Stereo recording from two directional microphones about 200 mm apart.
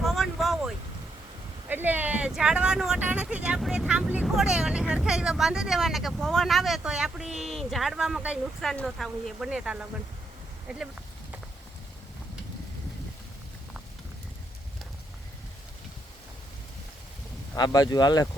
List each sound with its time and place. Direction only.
0.0 s vehicle: centre (ahead or behind)
1.6 s speech: 10° right (ahead or behind)
17.5 s speech: 20° left (ahead or behind)